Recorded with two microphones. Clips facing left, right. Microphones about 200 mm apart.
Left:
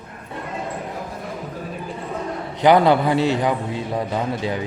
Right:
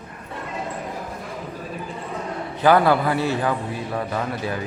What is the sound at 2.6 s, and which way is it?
A man's voice, 20° left (ahead or behind).